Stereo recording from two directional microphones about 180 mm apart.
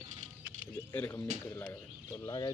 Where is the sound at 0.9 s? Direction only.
10° left (ahead or behind).